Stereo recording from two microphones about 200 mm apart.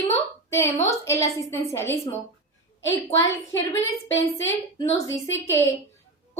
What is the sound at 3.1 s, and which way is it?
Speech, 15° left (ahead or behind).